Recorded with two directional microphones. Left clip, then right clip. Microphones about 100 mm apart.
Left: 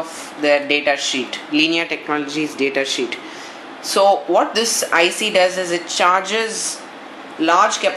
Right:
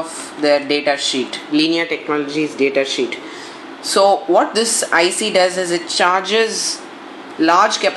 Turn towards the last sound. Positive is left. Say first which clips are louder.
# right 2 dB
turn(degrees=10)  # may be behind; listen again after turning